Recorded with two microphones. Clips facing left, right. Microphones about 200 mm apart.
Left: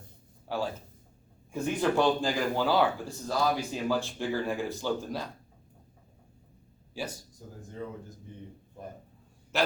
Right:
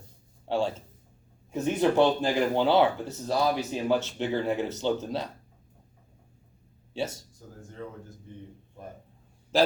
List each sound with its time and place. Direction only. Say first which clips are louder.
0.4 s speech: right 5 dB; 25° right (ahead or behind)
6.9 s speech: right 5 dB; 25° right (ahead or behind)